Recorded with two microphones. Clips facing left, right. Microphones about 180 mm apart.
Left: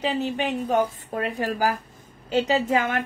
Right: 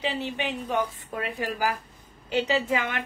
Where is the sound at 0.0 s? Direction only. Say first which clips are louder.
Left 4 dB; 40° left (ahead or behind).